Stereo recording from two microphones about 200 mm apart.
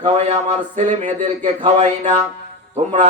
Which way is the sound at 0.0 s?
35° right (ahead or behind).